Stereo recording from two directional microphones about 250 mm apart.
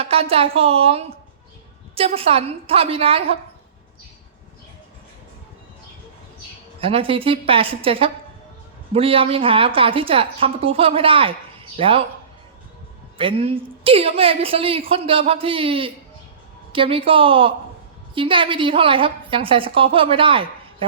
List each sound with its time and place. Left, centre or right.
0.0 s a woman's voice: right
6.7 s a woman's voice: right
13.1 s a woman's voice: right